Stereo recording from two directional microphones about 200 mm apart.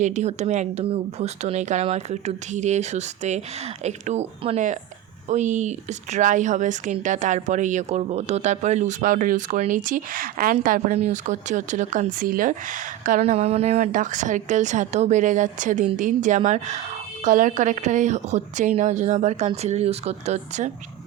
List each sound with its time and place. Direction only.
0.0 s a woman's voice: 35° right (ahead or behind)